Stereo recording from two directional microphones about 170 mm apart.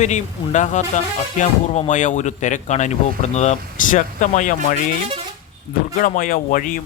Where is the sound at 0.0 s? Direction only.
45° left (ahead or behind).